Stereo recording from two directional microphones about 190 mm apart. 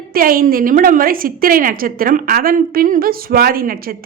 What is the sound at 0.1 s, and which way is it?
A woman's voice, 50° right (ahead or behind).